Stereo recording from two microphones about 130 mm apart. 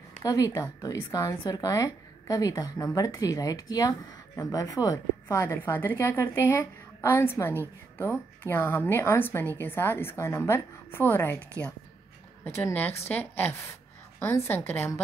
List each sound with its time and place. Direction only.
0.2 s a woman's voice: 25° left (ahead or behind)